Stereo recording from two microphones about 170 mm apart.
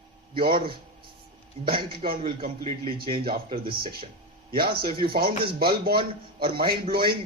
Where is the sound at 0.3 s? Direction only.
60° right (ahead or behind).